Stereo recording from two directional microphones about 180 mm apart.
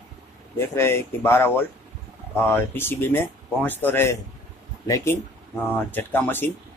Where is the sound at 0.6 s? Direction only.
15° left (ahead or behind).